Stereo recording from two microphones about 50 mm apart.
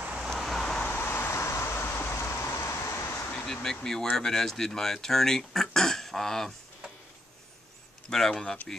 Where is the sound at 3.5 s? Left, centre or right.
Centre.